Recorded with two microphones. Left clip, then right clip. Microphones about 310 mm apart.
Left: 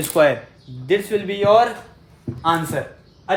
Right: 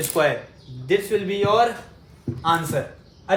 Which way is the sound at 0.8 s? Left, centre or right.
Left.